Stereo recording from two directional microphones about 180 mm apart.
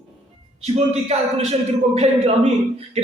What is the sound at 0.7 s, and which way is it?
Speech, 35° right (ahead or behind).